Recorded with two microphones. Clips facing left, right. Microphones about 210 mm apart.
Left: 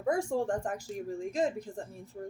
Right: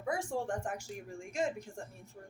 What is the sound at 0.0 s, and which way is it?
A woman's voice, 40° left (ahead or behind).